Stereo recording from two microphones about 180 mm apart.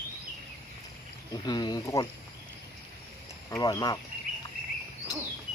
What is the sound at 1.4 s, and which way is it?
Speech, 25° left (ahead or behind).